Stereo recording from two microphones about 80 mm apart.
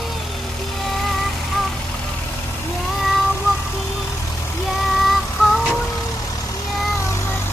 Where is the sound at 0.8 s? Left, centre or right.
Centre.